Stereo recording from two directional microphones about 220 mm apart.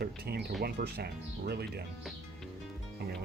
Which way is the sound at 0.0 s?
45° right (ahead or behind).